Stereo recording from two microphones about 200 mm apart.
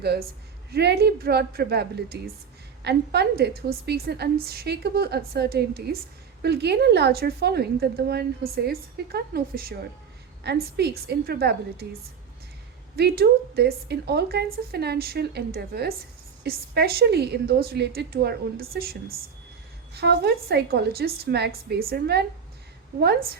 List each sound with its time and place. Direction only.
0.0 s a woman's voice: 55° right (ahead or behind)
13.0 s a woman's voice: 50° right (ahead or behind)